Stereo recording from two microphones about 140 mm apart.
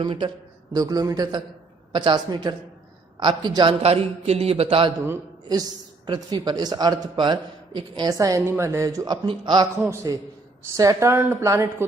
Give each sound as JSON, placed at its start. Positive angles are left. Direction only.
{"t": 0.0, "sound": "a woman's voice", "side_deg": -35}
{"t": 6.1, "sound": "a woman's voice", "side_deg": -30}
{"t": 8.2, "sound": "speech", "side_deg": -20}
{"t": 9.8, "sound": "speech", "side_deg": -20}